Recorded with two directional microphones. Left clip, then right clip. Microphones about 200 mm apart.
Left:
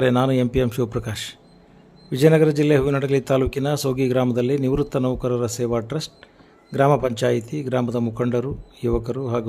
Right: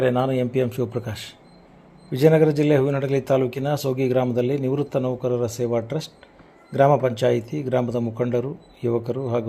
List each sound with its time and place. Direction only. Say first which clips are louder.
0.0 s a man's voice: left 2 dB; 25° left (ahead or behind)